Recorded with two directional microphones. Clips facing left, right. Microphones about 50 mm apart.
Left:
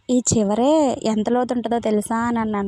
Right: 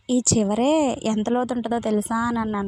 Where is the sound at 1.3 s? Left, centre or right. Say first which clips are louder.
Left 3 dB; left.